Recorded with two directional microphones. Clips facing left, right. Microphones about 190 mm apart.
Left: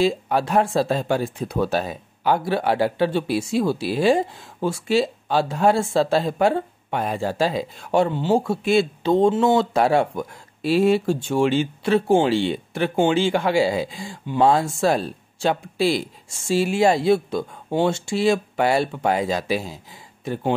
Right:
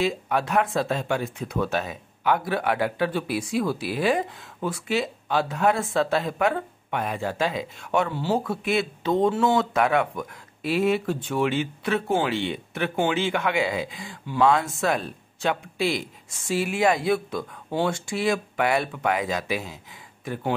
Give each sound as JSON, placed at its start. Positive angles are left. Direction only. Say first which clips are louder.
{"t": 0.0, "sound": "speech", "louder": "left 4 dB", "side_deg": 35}